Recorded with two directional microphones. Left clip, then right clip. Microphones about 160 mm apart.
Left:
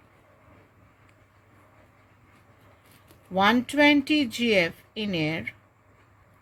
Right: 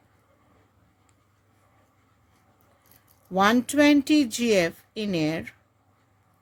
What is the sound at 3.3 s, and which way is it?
A woman's voice, 90° right.